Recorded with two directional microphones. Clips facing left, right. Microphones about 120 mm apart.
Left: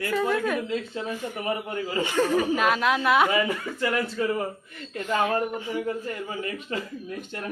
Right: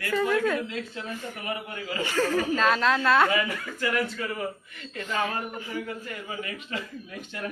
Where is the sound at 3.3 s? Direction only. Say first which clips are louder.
Left 3 dB; 25° left (ahead or behind).